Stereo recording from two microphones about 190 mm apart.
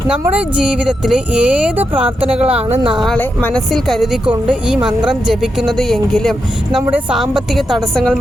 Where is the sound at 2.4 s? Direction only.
30° right (ahead or behind).